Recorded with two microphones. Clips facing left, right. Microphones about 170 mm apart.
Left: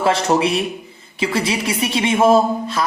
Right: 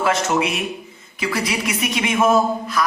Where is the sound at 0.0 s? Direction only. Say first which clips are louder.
Left 3 dB; 30° left (ahead or behind).